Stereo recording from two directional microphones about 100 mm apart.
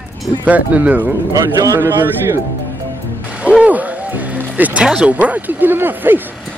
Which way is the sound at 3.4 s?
10° right (ahead or behind).